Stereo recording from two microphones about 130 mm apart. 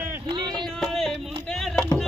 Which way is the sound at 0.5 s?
5° left (ahead or behind).